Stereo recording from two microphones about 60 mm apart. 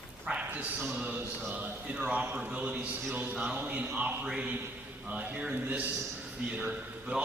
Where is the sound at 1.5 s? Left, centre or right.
Right.